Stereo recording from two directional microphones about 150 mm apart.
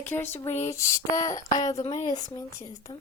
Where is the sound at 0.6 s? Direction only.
20° left (ahead or behind).